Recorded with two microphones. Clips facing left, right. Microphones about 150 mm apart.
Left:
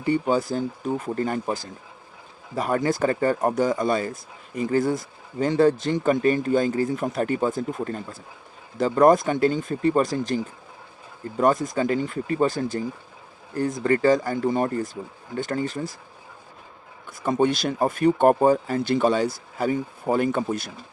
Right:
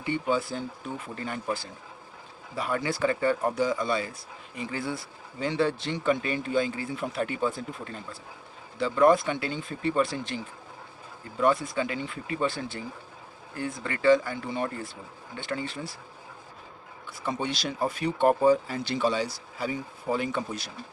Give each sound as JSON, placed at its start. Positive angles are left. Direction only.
{"t": 0.0, "sound": "speech", "side_deg": 40}
{"t": 17.1, "sound": "speech", "side_deg": 45}